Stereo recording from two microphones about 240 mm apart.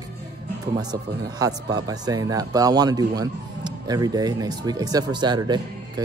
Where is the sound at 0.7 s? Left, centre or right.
Centre.